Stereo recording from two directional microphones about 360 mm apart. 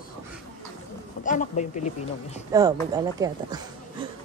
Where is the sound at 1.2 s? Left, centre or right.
Left.